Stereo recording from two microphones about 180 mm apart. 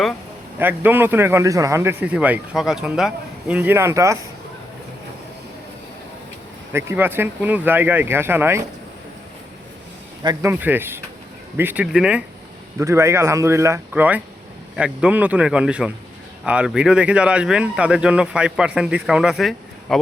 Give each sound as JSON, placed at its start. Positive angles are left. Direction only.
{"t": 0.6, "sound": "a man's voice", "side_deg": -10}
{"t": 6.7, "sound": "a man's voice", "side_deg": -15}
{"t": 10.2, "sound": "a man's voice", "side_deg": -15}
{"t": 12.8, "sound": "a man's voice", "side_deg": -15}